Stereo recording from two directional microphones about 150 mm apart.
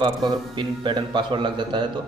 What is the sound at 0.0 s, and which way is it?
A man's voice, 30° right (ahead or behind).